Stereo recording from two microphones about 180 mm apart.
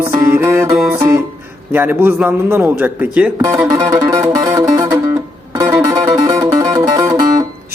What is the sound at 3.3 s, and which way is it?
Speech, 20° right (ahead or behind).